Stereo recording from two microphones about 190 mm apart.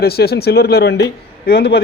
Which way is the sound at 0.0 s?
55° left (ahead or behind).